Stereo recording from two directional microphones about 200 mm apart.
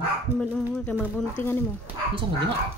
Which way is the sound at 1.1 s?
10° left (ahead or behind).